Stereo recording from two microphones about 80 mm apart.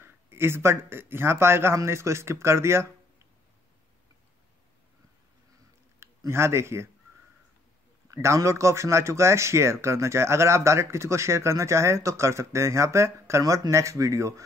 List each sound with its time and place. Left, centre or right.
0.0 s speech: right
5.9 s speech: right
8.1 s a man's voice: right